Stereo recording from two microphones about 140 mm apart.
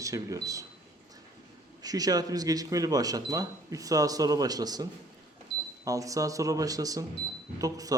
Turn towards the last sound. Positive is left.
turn(degrees=-25)  # may be behind; listen again after turning